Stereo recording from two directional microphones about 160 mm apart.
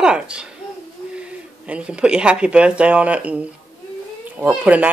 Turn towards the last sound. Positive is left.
turn(degrees=-10)  # may be behind; listen again after turning